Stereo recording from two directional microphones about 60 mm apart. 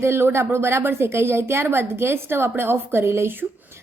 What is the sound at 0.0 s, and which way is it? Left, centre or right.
A woman's voice, right.